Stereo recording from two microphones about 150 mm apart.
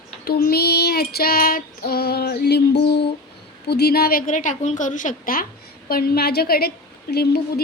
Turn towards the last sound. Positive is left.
turn(degrees=90)